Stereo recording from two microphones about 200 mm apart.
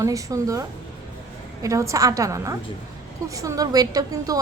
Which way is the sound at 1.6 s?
15° right (ahead or behind).